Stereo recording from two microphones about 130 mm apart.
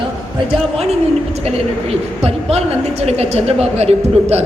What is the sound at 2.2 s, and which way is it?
A woman's voice, 50° right (ahead or behind).